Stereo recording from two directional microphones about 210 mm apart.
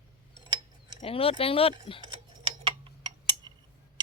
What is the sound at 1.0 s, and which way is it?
Speech, 25° left (ahead or behind).